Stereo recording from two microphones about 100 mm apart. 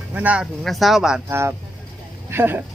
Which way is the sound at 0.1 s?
15° right (ahead or behind).